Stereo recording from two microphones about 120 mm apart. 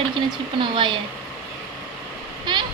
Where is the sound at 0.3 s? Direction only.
40° right (ahead or behind).